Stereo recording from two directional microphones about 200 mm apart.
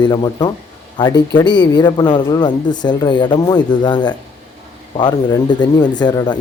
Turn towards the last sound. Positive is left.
turn(degrees=20)  # may be behind; listen again after turning